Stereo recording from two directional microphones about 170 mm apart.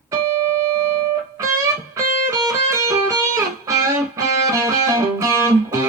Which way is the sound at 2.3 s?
20° right (ahead or behind).